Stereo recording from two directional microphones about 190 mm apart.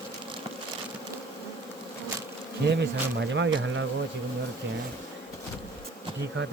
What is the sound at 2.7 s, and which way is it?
Speech, 70° right (ahead or behind).